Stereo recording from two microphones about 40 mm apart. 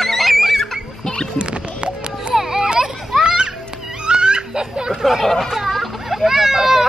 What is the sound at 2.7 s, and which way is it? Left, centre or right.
Children playing, centre.